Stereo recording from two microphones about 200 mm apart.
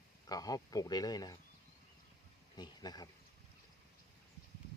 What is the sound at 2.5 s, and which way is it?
Speech, 20° left (ahead or behind).